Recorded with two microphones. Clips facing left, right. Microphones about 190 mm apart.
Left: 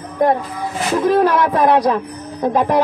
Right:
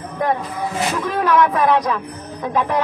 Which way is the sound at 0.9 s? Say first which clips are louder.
Left 5 dB; 35° left (ahead or behind).